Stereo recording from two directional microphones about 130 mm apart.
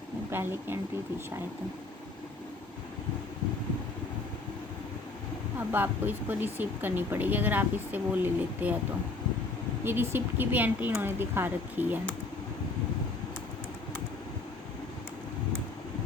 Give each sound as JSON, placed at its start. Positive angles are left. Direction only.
{"t": 0.3, "sound": "speech", "side_deg": -15}
{"t": 5.5, "sound": "speech", "side_deg": -15}
{"t": 9.8, "sound": "speech", "side_deg": -15}